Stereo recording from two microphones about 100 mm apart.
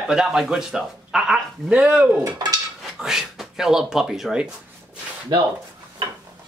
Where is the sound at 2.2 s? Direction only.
35° right (ahead or behind).